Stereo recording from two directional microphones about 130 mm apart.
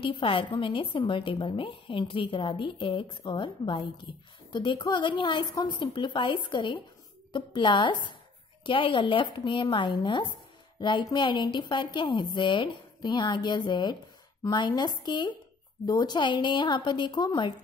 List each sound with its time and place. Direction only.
0.0 s a woman's voice: 40° left (ahead or behind)